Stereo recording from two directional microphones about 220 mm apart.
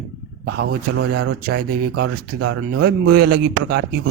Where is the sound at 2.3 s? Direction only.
80° right.